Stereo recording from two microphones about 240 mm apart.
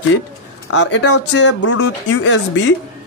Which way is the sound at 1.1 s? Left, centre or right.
Left.